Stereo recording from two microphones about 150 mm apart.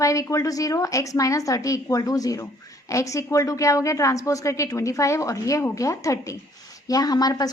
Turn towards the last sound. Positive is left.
turn(degrees=25)  # may be behind; listen again after turning